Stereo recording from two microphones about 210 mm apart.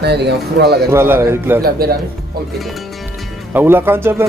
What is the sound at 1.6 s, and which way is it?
Speech, 45° right (ahead or behind).